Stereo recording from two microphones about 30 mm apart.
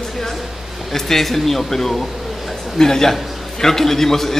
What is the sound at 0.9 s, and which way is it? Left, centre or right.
A man's voice, centre.